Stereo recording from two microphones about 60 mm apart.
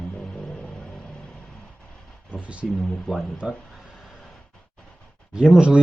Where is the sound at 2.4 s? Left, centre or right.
Centre.